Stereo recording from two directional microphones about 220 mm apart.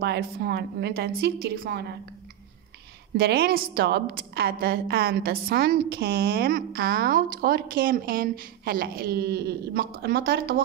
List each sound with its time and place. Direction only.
0.0 s a woman's voice: 50° right (ahead or behind)
3.2 s a woman's voice: 45° right (ahead or behind)